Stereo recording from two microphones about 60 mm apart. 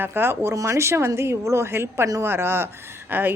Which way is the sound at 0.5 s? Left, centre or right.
Right.